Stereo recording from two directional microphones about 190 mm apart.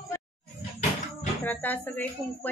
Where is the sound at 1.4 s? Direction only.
10° left (ahead or behind).